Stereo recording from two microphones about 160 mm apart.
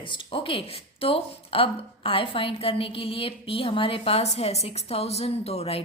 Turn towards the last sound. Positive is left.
turn(degrees=40)  # may be behind; listen again after turning